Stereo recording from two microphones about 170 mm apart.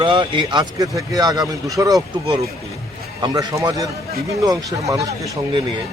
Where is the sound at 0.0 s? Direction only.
30° right (ahead or behind).